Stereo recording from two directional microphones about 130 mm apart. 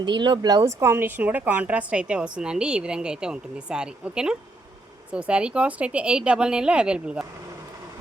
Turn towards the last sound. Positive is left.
turn(degrees=-5)  # may be behind; listen again after turning